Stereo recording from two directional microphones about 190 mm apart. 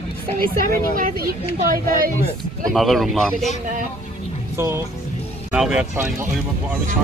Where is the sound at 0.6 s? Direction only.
45° right (ahead or behind).